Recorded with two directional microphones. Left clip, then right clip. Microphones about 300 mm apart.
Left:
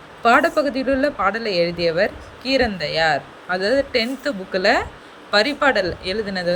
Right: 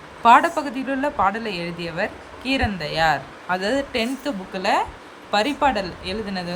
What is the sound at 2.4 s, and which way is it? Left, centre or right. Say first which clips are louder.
Speech: left 4 dB; right.